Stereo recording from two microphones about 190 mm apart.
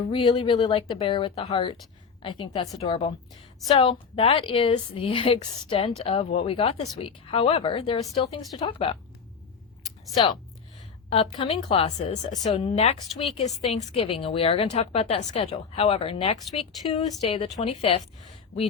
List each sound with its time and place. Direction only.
0.1 s a woman's voice: 25° left (ahead or behind)
4.1 s a woman's voice: 30° left (ahead or behind)
11.1 s speech: 30° left (ahead or behind)